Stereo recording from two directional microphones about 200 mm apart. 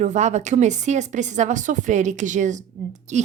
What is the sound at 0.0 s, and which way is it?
A woman's voice, 35° right (ahead or behind).